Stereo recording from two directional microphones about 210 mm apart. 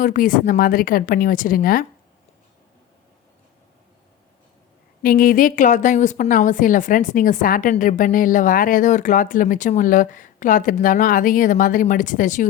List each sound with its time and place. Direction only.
0.0 s a woman's voice: 40° left (ahead or behind)
5.0 s a woman's voice: 40° left (ahead or behind)